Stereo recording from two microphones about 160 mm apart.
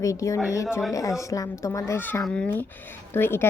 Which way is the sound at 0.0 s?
20° left (ahead or behind).